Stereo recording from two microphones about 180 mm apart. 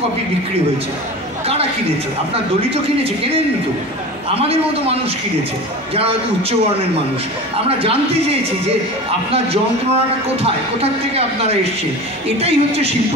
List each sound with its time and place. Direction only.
4.4 s a man's voice: 35° right (ahead or behind)
7.6 s a man's voice: 30° right (ahead or behind)